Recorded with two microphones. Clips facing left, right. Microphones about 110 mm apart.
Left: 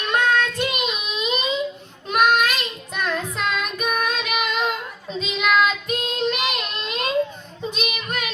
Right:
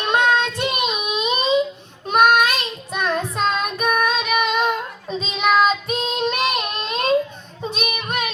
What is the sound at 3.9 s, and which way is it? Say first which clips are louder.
Music: right 5 dB; 25° right (ahead or behind).